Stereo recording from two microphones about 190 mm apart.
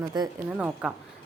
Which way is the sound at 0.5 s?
5° right (ahead or behind).